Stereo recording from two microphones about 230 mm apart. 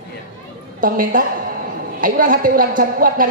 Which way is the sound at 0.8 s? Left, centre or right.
Right.